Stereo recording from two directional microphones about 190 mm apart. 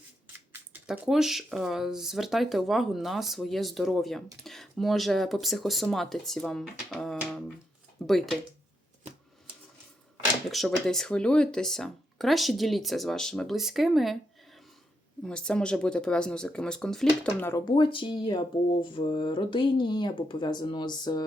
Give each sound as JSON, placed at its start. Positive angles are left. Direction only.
{"t": 0.7, "sound": "speech", "side_deg": -5}
{"t": 10.5, "sound": "speech", "side_deg": 0}
{"t": 15.2, "sound": "speech", "side_deg": 5}
{"t": 17.5, "sound": "speech", "side_deg": 25}